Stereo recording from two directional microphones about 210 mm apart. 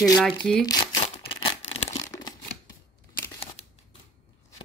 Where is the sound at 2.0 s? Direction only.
15° left (ahead or behind).